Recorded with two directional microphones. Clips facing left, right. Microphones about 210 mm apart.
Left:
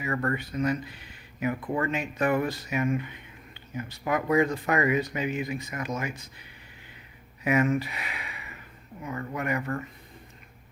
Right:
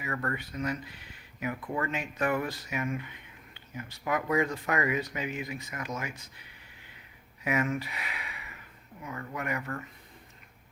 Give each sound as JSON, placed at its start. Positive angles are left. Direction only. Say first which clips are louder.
{"t": 0.0, "sound": "speech", "louder": "left 5 dB", "side_deg": 30}
{"t": 7.4, "sound": "speech", "louder": "left 6 dB", "side_deg": 25}